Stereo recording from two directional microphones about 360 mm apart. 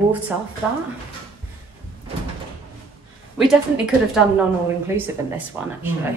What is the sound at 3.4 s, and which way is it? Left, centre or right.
Speech, centre.